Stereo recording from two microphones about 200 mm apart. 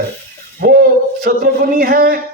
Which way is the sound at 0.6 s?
50° right (ahead or behind).